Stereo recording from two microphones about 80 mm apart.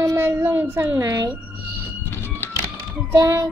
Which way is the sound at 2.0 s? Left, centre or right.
Left.